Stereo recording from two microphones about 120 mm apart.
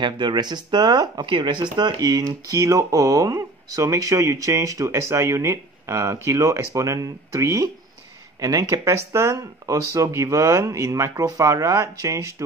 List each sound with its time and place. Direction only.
0.0 s speech: 40° right (ahead or behind)